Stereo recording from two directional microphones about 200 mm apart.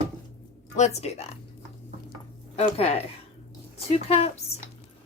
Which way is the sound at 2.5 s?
30° left (ahead or behind).